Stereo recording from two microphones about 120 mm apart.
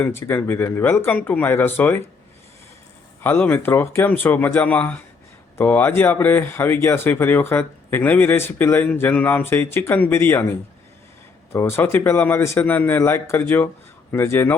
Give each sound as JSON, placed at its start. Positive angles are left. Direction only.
{"t": 0.0, "sound": "a man's voice", "side_deg": 20}
{"t": 3.2, "sound": "a man's voice", "side_deg": 15}